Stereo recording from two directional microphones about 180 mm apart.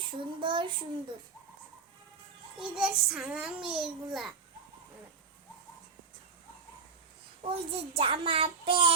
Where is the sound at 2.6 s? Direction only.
5° right (ahead or behind).